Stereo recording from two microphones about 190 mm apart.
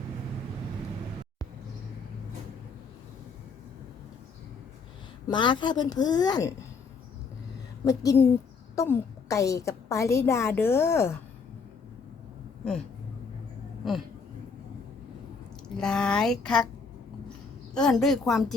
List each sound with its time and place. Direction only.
5.3 s a woman's voice: 25° left (ahead or behind)
7.9 s a woman's voice: 15° left (ahead or behind)
15.8 s speech: 5° left (ahead or behind)
17.7 s speech: centre (ahead or behind)